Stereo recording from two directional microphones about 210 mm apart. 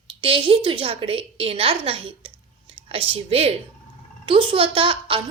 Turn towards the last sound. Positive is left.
turn(degrees=-25)  # may be behind; listen again after turning